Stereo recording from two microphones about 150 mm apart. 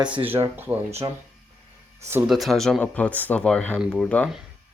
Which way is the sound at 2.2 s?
Centre (ahead or behind).